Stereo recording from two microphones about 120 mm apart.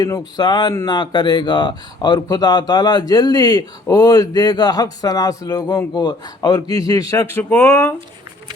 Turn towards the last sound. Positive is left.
turn(degrees=20)  # may be behind; listen again after turning